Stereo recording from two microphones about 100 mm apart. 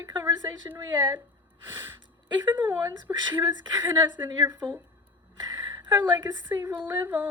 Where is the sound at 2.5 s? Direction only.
20° right (ahead or behind).